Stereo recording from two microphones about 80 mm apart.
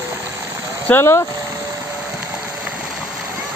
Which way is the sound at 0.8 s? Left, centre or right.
Left.